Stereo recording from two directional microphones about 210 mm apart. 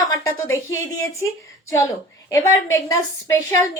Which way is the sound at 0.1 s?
15° left (ahead or behind).